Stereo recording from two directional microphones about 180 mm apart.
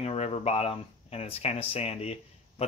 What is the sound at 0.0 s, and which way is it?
Speech, 35° left (ahead or behind).